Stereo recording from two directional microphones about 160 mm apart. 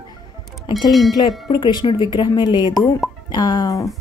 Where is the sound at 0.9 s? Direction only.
Centre (ahead or behind).